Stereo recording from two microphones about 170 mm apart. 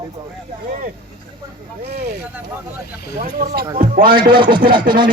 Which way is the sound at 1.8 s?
60° right (ahead or behind).